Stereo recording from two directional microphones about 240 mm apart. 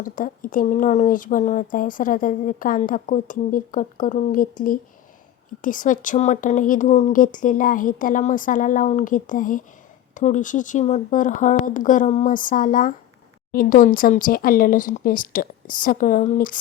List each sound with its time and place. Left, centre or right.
0.0 s speech: left
5.6 s speech: left